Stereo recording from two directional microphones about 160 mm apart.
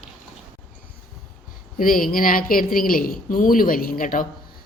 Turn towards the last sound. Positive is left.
turn(degrees=60)  # may be behind; listen again after turning